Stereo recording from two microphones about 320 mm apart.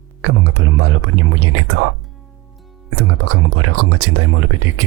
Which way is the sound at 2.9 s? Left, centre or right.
Right.